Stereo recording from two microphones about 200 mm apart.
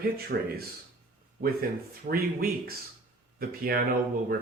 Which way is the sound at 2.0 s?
50° right (ahead or behind).